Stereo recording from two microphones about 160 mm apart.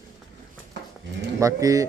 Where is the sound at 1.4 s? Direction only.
20° right (ahead or behind).